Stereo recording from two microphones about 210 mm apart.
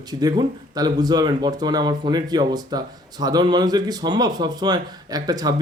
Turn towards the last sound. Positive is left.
turn(degrees=-20)  # may be behind; listen again after turning